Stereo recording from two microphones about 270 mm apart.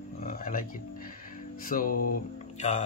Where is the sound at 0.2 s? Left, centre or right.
Left.